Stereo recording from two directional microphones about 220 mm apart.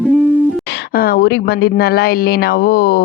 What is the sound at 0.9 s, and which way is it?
Speech, 45° left (ahead or behind).